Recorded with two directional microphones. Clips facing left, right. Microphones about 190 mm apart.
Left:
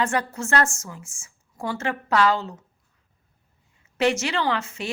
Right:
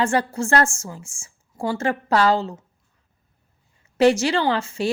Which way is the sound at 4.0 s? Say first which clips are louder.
Right 6 dB; 35° right (ahead or behind).